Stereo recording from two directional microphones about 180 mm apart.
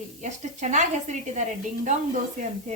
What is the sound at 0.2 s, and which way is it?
A woman's voice, 40° right (ahead or behind).